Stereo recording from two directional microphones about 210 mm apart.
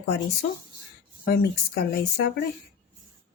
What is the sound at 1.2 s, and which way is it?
Speech, 45° left (ahead or behind).